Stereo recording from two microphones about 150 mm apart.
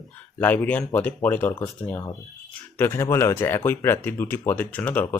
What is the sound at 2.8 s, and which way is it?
Speech, 15° left (ahead or behind).